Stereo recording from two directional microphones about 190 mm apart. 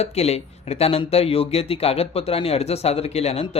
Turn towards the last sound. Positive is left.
turn(degrees=30)  # may be behind; listen again after turning